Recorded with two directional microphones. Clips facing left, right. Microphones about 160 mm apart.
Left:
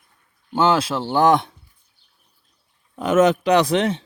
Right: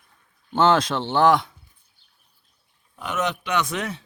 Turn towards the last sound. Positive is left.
turn(degrees=30)  # may be behind; listen again after turning